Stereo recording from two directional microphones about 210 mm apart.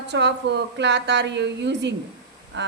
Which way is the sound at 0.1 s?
55° right (ahead or behind).